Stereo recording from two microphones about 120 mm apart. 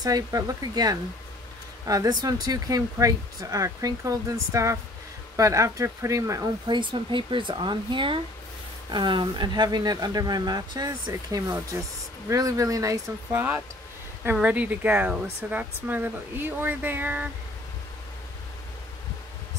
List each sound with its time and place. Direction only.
0.0 s speech: 30° right (ahead or behind)
6.7 s speech: 40° right (ahead or behind); by 17.3 s 15° right (ahead or behind)